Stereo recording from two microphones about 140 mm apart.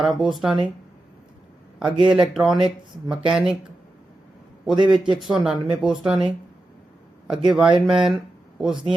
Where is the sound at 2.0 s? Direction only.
5° right (ahead or behind).